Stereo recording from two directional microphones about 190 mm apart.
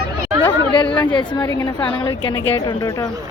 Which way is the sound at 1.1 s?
25° left (ahead or behind).